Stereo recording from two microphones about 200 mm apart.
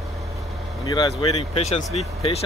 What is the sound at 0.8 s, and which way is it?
Speech, 20° left (ahead or behind).